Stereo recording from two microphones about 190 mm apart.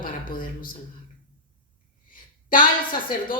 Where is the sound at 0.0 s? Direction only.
45° left (ahead or behind).